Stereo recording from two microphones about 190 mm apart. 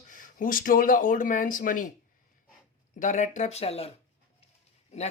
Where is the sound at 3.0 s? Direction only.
40° left (ahead or behind).